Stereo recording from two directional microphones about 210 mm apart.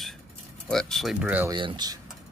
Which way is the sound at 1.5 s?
20° right (ahead or behind).